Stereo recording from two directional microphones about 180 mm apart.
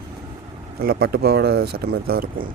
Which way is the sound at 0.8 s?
55° right (ahead or behind).